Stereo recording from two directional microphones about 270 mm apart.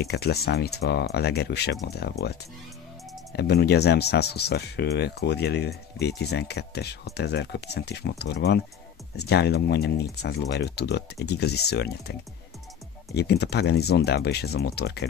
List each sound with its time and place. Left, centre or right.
0.0 s speech: left
3.3 s speech: left
13.1 s speech: left